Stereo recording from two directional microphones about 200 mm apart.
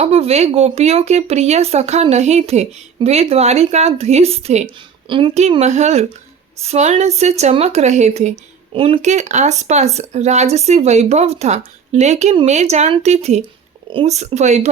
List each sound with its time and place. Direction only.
0.0 s speech: 30° right (ahead or behind)